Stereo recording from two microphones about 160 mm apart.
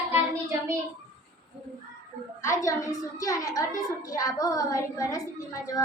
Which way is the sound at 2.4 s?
20° left (ahead or behind).